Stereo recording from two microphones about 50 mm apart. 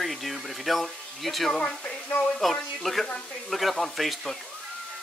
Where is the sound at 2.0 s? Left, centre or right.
Left.